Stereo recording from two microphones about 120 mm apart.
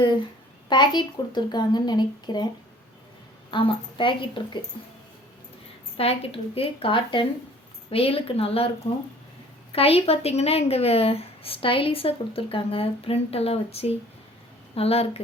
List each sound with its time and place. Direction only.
0.7 s a woman's voice: 40° left (ahead or behind)
3.5 s speech: 45° left (ahead or behind)
6.0 s speech: 55° left (ahead or behind)
9.7 s speech: 55° left (ahead or behind)